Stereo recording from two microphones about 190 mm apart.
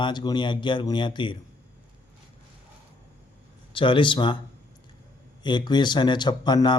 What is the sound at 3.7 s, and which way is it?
Speech, 25° left (ahead or behind).